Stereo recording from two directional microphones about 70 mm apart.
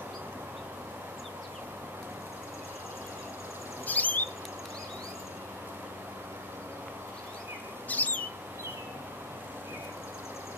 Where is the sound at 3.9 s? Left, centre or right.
Left.